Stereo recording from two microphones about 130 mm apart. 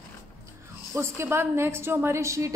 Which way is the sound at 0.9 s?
20° right (ahead or behind).